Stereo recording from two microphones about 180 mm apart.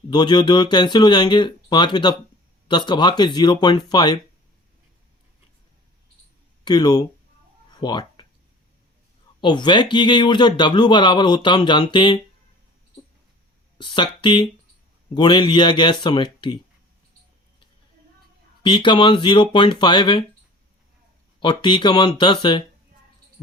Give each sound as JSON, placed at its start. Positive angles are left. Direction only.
{"t": 0.1, "sound": "speech", "side_deg": 25}
{"t": 6.7, "sound": "speech", "side_deg": 20}
{"t": 7.8, "sound": "a sound", "side_deg": 25}
{"t": 9.4, "sound": "speech", "side_deg": 25}
{"t": 13.7, "sound": "speech", "side_deg": 25}
{"t": 18.6, "sound": "speech", "side_deg": 25}
{"t": 21.4, "sound": "speech", "side_deg": 25}